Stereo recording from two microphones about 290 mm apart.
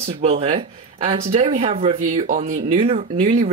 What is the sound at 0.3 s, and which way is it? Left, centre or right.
Speech, centre.